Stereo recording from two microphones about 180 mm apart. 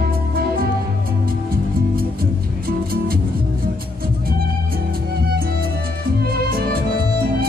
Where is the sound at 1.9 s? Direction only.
55° right (ahead or behind).